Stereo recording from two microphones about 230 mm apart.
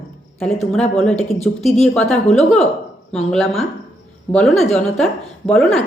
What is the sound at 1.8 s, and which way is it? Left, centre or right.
Speech, centre.